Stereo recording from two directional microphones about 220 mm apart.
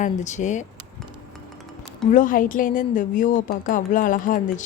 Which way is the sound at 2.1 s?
35° left (ahead or behind).